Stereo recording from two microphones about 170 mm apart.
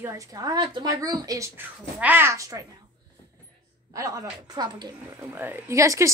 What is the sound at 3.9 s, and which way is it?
Speech, 20° right (ahead or behind).